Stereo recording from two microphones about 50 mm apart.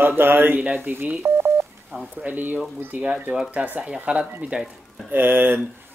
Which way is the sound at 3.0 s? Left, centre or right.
Right.